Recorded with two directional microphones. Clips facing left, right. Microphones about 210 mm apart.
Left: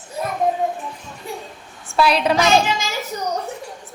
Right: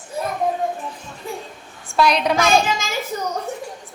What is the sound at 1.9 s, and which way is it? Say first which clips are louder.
Speech: left 1 dB; 5° left (ahead or behind).